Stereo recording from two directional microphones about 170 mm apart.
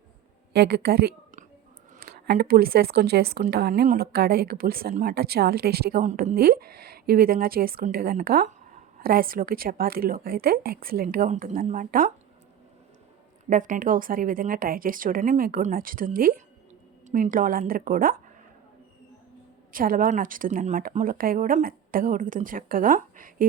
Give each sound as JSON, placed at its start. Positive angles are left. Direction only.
{"t": 0.5, "sound": "a woman's voice", "side_deg": -70}
{"t": 13.5, "sound": "a woman's voice", "side_deg": -50}
{"t": 19.7, "sound": "speech", "side_deg": -55}